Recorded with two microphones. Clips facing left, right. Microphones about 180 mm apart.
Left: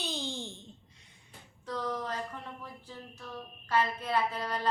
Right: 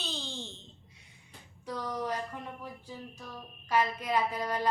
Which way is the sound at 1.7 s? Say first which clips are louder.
Right 1 dB; 10° right (ahead or behind).